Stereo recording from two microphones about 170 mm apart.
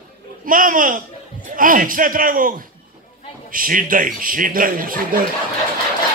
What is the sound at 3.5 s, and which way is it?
Speech, 55° right (ahead or behind).